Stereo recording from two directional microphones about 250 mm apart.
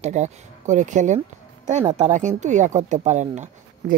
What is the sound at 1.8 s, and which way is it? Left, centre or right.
Speech, centre.